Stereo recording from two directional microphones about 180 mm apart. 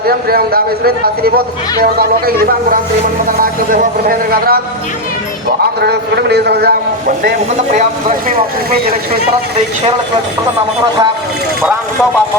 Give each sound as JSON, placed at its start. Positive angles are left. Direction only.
{"t": 0.0, "sound": "a man's voice", "side_deg": -55}
{"t": 3.4, "sound": "speech", "side_deg": -50}
{"t": 5.8, "sound": "a man's voice", "side_deg": -65}